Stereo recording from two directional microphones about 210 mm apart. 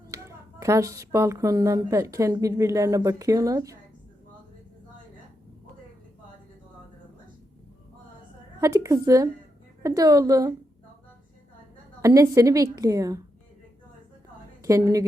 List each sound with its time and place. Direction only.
0.1 s speech: 15° right (ahead or behind)
8.6 s speech: 15° right (ahead or behind)
12.0 s speech: 15° right (ahead or behind)
14.6 s a woman's voice: 15° right (ahead or behind)